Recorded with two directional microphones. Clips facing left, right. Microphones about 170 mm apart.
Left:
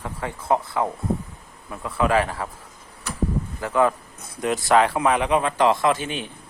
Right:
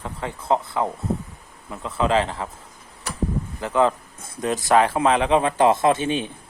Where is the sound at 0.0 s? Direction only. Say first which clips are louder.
Even; 20° right (ahead or behind).